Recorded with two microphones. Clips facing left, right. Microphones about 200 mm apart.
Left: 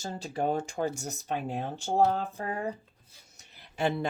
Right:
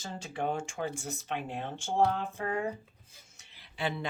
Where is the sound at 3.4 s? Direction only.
45° left (ahead or behind).